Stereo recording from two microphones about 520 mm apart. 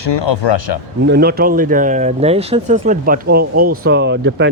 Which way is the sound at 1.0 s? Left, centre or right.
Centre.